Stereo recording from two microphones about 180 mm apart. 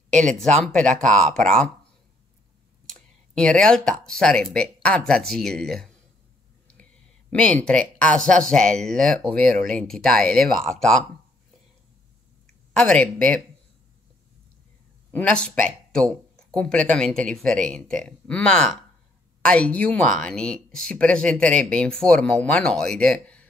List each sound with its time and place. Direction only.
0.6 s speech: 5° left (ahead or behind)
0.8 s speech: 45° right (ahead or behind)
1.3 s speech: 5° left (ahead or behind)
2.9 s speech: 5° left (ahead or behind)
12.7 s speech: 5° left (ahead or behind)
15.0 s speech: 5° left (ahead or behind)